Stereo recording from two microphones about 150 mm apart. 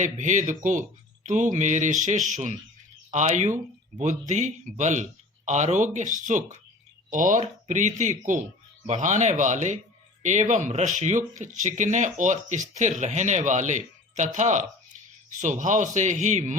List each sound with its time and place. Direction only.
0.0 s speech: 55° right (ahead or behind)